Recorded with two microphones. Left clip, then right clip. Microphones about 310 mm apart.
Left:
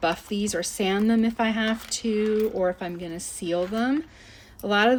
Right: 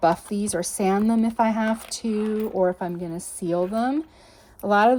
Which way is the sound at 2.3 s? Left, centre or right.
Right.